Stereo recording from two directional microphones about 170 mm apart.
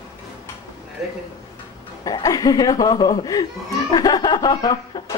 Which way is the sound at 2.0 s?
20° left (ahead or behind).